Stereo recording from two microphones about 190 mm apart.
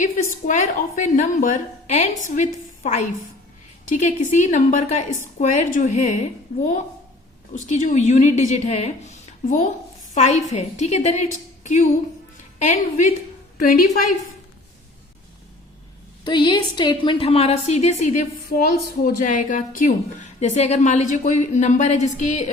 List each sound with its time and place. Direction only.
0.0 s a woman's voice: 40° left (ahead or behind)
7.7 s a woman's voice: 40° left (ahead or behind)
16.2 s a woman's voice: 25° left (ahead or behind)